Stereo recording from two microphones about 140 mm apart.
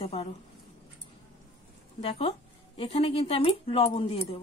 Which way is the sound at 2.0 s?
45° left (ahead or behind).